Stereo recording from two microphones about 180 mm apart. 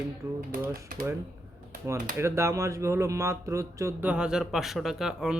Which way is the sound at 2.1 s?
15° right (ahead or behind).